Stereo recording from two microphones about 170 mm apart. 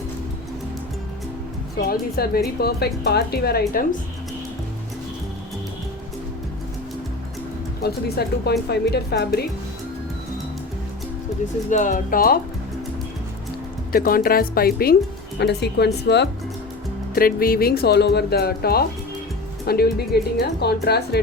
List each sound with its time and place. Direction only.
1.9 s speech: 65° left (ahead or behind)
7.8 s speech: 70° left (ahead or behind)
11.7 s speech: 45° left (ahead or behind)
13.9 s speech: 60° left (ahead or behind)
15.4 s speech: 80° left
17.2 s speech: 60° left (ahead or behind)